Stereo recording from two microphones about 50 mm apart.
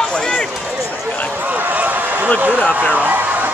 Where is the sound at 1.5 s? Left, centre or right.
Right.